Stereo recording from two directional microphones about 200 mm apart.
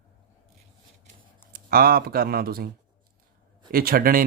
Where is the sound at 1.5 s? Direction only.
45° right (ahead or behind).